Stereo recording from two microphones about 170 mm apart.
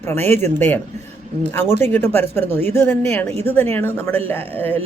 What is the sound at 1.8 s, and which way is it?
Speech, 10° left (ahead or behind).